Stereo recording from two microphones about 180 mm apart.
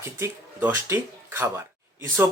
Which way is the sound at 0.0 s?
15° right (ahead or behind).